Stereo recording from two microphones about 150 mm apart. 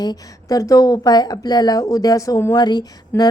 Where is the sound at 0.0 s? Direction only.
25° left (ahead or behind).